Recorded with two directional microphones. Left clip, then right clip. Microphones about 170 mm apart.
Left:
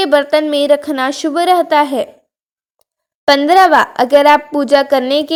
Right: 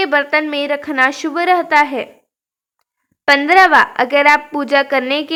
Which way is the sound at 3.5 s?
35° left (ahead or behind).